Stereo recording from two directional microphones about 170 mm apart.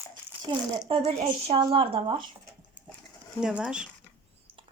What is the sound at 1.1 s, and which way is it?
A woman's voice, 35° right (ahead or behind).